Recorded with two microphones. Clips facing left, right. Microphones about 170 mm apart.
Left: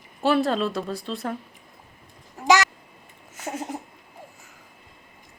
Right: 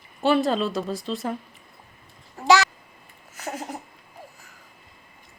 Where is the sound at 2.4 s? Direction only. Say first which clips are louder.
Right 1 dB; 15° left (ahead or behind).